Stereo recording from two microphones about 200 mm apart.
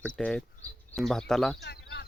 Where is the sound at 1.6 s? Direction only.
55° left (ahead or behind).